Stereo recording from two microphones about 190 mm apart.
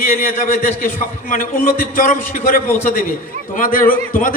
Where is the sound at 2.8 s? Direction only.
45° left (ahead or behind).